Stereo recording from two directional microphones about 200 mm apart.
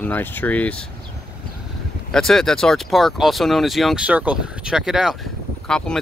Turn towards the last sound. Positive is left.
turn(degrees=5)  # may be behind; listen again after turning